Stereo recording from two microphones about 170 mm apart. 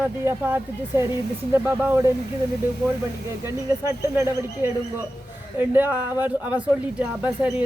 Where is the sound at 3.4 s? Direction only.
15° right (ahead or behind).